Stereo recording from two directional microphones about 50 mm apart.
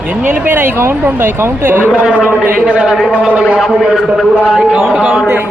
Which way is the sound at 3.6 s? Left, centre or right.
Centre.